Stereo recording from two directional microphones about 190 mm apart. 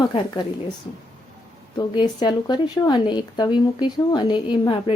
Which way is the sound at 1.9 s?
25° left (ahead or behind).